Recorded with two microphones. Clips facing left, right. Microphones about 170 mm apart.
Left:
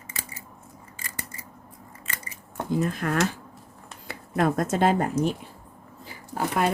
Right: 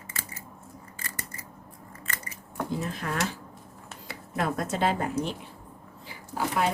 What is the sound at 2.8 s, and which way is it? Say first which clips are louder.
Speech: left 6 dB; 55° left (ahead or behind).